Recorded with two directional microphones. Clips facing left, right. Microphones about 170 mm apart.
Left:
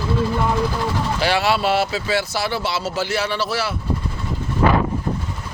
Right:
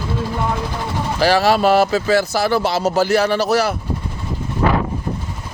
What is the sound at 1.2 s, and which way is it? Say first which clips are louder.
Speech: right 6 dB; 40° right (ahead or behind).